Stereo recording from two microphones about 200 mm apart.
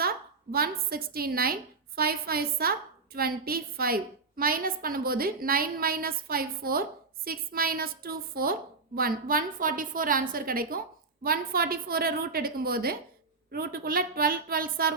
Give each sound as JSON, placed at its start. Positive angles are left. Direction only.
{"t": 0.5, "sound": "a woman's voice", "side_deg": -50}